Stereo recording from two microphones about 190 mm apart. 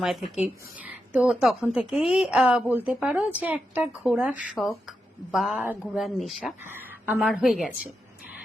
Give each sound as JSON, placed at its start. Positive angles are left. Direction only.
{"t": 0.4, "sound": "a woman's voice", "side_deg": -10}